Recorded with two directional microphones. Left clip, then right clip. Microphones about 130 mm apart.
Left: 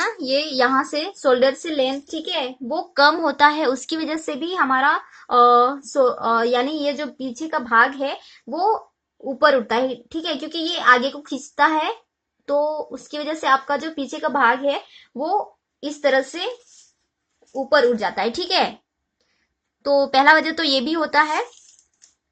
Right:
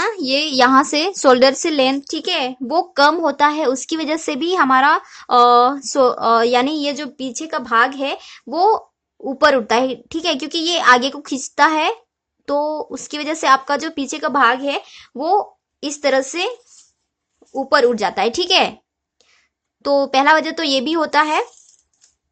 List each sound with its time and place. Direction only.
0.1 s speech: 45° right (ahead or behind)
2.9 s speech: 30° right (ahead or behind)
17.5 s speech: 55° right (ahead or behind); by 18.7 s 35° right (ahead or behind)
19.8 s speech: 35° right (ahead or behind)